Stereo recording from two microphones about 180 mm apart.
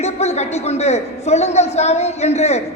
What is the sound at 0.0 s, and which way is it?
A woman's voice, 40° left (ahead or behind).